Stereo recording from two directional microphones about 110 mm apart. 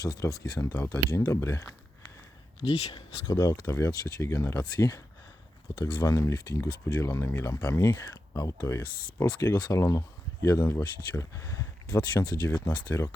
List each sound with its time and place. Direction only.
0.0 s speech: 35° left (ahead or behind)
2.6 s speech: 70° left (ahead or behind)
3.3 s speech: 25° left (ahead or behind)
6.0 s speech: 30° left (ahead or behind)